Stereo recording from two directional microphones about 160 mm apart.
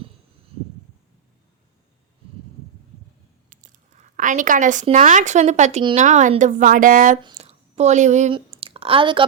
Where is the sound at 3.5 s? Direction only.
50° right (ahead or behind).